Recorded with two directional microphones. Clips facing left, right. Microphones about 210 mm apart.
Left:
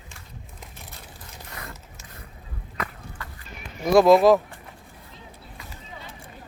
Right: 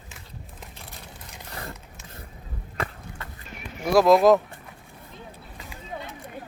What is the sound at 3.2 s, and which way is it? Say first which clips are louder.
Run: left 1 dB; 25° right (ahead or behind).